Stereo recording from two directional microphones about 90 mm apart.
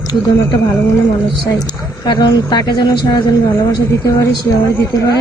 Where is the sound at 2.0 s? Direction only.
50° left (ahead or behind).